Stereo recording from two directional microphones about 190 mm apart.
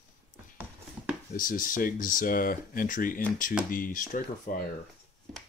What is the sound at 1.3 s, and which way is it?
Speech, 45° left (ahead or behind).